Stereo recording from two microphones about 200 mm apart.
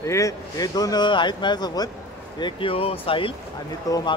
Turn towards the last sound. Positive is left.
turn(degrees=15)  # may be behind; listen again after turning